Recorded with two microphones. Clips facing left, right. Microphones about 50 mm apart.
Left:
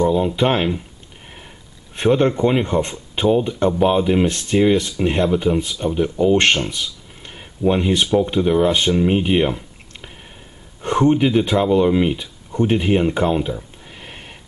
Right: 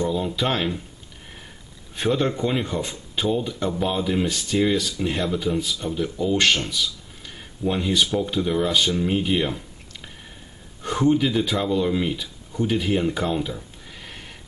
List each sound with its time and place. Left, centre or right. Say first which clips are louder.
0.0 s speech: left 7 dB; left
2.0 s speech: left 6 dB; left
10.8 s speech: left 4 dB; left
13.5 s a sound: left 6 dB; left